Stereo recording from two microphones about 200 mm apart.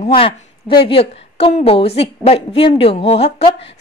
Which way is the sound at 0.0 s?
25° left (ahead or behind).